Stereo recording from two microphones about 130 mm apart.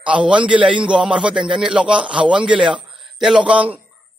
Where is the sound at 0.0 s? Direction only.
10° right (ahead or behind).